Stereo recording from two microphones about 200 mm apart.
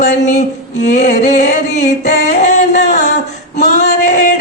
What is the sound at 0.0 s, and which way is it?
Singing, 40° left (ahead or behind).